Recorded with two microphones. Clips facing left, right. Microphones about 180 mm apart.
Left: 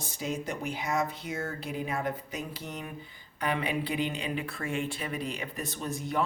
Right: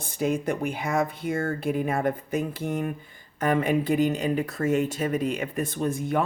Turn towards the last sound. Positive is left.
turn(degrees=-50)  # may be behind; listen again after turning